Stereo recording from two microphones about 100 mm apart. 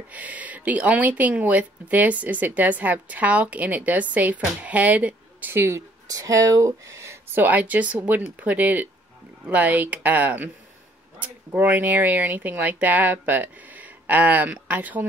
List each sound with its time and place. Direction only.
0.1 s speech: 15° right (ahead or behind)